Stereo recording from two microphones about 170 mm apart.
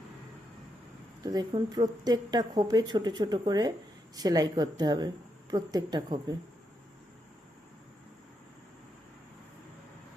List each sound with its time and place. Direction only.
1.2 s a woman's voice: 25° right (ahead or behind)